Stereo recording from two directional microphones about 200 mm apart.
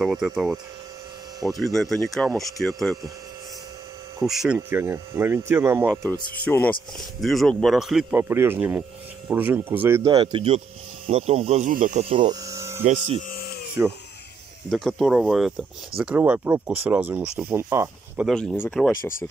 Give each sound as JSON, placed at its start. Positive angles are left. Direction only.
{"t": 0.0, "sound": "speech", "side_deg": 0}
{"t": 1.6, "sound": "speech", "side_deg": 0}
{"t": 4.3, "sound": "speech", "side_deg": 0}
{"t": 6.4, "sound": "speech", "side_deg": 10}
{"t": 12.8, "sound": "speech", "side_deg": -35}
{"t": 13.3, "sound": "a sound", "side_deg": 50}
{"t": 14.7, "sound": "speech", "side_deg": 0}
{"t": 18.3, "sound": "speech", "side_deg": 5}
{"t": 18.9, "sound": "speech", "side_deg": 45}